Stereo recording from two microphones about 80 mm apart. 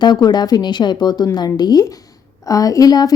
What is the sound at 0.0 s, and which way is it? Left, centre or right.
A woman's voice, left.